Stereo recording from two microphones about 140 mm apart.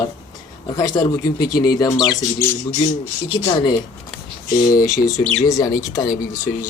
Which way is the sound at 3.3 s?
30° left (ahead or behind).